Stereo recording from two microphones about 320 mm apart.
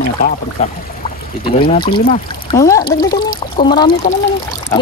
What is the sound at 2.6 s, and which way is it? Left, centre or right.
Speech, centre.